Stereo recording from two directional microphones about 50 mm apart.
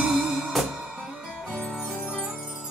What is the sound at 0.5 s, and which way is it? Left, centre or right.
Music, centre.